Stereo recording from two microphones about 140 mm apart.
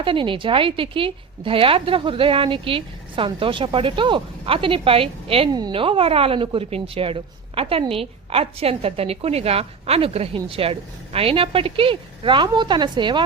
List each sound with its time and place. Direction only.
0.0 s speech: 35° right (ahead or behind)